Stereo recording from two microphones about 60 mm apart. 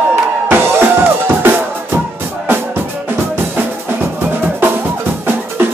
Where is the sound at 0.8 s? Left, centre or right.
Right.